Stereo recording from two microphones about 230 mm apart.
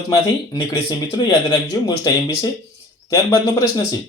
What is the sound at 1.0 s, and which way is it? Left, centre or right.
Speech, centre.